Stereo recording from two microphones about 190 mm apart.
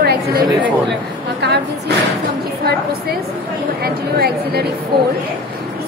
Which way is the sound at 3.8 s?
55° right (ahead or behind).